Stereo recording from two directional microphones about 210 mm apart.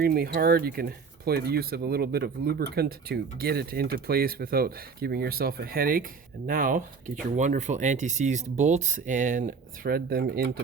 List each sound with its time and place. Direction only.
0.0 s speech: 45° right (ahead or behind)